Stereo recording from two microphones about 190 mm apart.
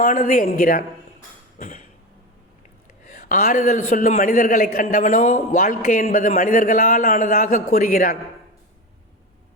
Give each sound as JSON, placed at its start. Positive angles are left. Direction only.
{"t": 0.0, "sound": "a man's voice", "side_deg": 45}
{"t": 1.5, "sound": "a sound", "side_deg": 45}
{"t": 3.0, "sound": "a man's voice", "side_deg": 45}